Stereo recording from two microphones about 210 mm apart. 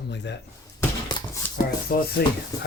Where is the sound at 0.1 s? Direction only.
55° left (ahead or behind).